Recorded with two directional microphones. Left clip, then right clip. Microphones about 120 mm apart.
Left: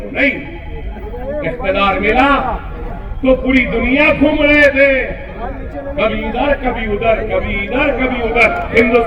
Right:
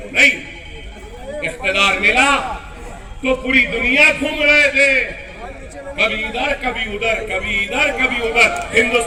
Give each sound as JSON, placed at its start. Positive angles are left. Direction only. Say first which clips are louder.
{"t": 0.1, "sound": "a man's voice", "louder": "right 3 dB", "side_deg": -55}
{"t": 1.4, "sound": "a man's voice", "louder": "left 1 dB", "side_deg": -50}
{"t": 8.7, "sound": "a man's voice", "louder": "left 4 dB", "side_deg": -35}